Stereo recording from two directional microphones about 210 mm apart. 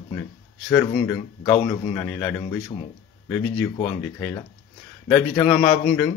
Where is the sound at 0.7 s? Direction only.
5° left (ahead or behind).